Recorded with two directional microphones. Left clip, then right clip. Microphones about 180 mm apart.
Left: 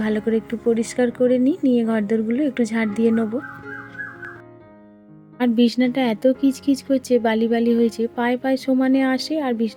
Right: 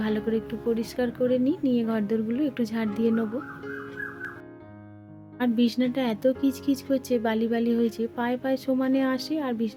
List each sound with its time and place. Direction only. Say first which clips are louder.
0.0 s speech: left 6 dB; 25° left (ahead or behind)
5.4 s speech: left 6 dB; 20° left (ahead or behind)